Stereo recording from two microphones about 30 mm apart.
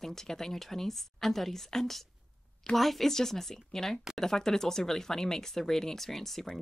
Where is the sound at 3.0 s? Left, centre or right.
Centre.